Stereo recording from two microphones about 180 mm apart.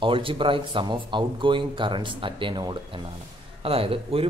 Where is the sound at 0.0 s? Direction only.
30° right (ahead or behind).